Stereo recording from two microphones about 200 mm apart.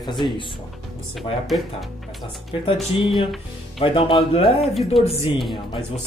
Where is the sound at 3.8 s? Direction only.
25° left (ahead or behind).